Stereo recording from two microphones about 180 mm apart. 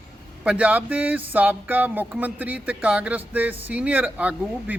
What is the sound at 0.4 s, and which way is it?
A man's voice, 10° right (ahead or behind).